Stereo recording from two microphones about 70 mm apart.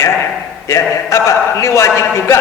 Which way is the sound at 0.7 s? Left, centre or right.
Left.